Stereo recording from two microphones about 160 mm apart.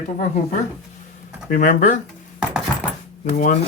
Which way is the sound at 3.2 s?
55° left (ahead or behind).